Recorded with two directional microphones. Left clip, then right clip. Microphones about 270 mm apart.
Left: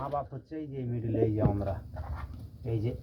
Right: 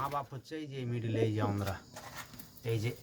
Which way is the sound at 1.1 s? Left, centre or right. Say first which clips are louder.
Left 4 dB; right.